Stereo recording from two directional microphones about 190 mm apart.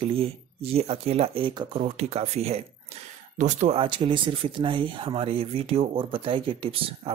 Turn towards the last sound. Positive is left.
turn(degrees=-25)  # may be behind; listen again after turning